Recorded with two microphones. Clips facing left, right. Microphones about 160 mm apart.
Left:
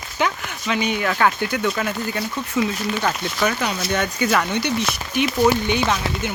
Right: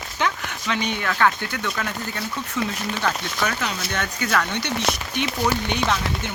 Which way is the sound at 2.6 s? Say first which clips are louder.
Left 4 dB; 10° left (ahead or behind).